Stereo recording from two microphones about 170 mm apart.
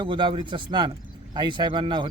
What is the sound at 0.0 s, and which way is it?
Speech, 30° right (ahead or behind).